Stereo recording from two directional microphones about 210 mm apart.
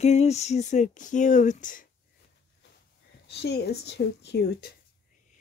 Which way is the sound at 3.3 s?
50° left (ahead or behind).